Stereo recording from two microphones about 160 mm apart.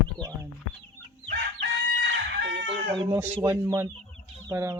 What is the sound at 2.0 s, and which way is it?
Chicken, 90° right.